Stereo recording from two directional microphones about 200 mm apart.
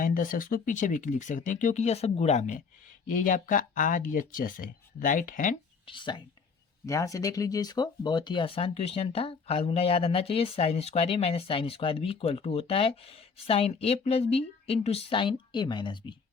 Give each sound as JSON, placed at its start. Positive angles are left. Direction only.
{"t": 0.0, "sound": "speech", "side_deg": 40}
{"t": 5.8, "sound": "speech", "side_deg": 25}